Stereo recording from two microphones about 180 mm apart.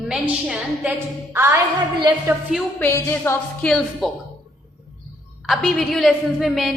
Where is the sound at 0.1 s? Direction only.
5° right (ahead or behind).